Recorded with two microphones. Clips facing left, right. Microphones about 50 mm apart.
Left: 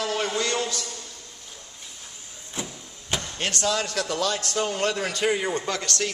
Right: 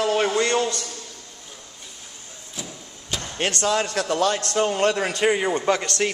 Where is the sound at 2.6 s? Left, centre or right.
Centre.